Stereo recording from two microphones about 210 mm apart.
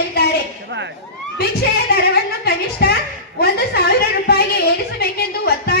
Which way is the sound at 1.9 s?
50° left (ahead or behind).